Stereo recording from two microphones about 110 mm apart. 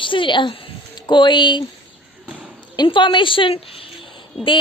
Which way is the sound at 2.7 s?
45° left (ahead or behind).